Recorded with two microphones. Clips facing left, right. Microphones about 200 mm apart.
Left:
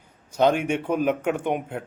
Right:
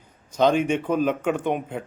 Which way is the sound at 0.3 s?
10° left (ahead or behind).